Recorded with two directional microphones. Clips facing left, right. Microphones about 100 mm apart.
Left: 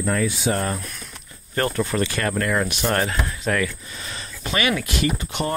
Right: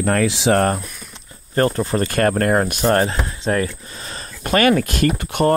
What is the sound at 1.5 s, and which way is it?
Speech, 35° right (ahead or behind).